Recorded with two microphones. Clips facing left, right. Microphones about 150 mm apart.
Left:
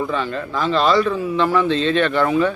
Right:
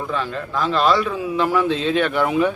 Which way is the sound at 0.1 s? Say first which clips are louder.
Left 1 dB; centre (ahead or behind).